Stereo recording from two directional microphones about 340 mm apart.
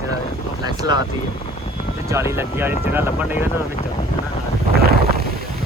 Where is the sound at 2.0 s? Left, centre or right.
Centre.